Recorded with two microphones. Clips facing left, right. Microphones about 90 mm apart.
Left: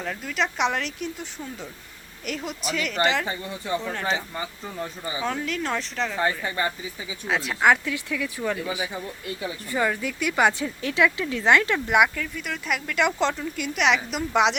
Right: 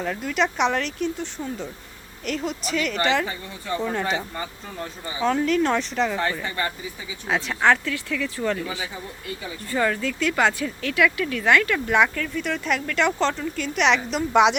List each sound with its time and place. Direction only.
0.0 s speech: 5° right (ahead or behind)
5.2 s speech: centre (ahead or behind)
7.3 s speech: centre (ahead or behind); by 12.0 s 20° left (ahead or behind)
12.0 s speech: 5° left (ahead or behind)